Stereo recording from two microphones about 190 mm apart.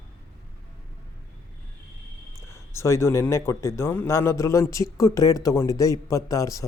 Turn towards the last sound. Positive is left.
turn(degrees=15)  # may be behind; listen again after turning